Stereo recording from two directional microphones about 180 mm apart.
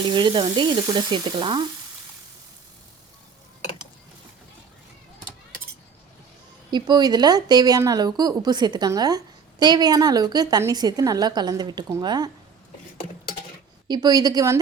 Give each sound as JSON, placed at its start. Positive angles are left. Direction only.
{"t": 0.1, "sound": "a woman's voice", "side_deg": -25}
{"t": 6.7, "sound": "a woman's voice", "side_deg": -25}
{"t": 13.8, "sound": "a woman's voice", "side_deg": -25}